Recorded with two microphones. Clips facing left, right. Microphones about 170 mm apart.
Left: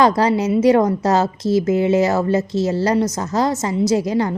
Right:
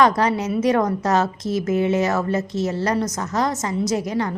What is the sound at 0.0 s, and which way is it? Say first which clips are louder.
A woman's voice: left 3 dB; 30° left (ahead or behind).